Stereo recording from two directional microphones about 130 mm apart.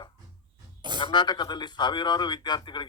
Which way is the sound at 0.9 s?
35° left (ahead or behind).